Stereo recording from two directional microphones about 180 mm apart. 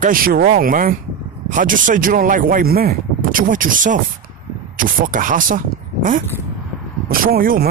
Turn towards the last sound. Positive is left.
turn(degrees=-55)  # may be behind; listen again after turning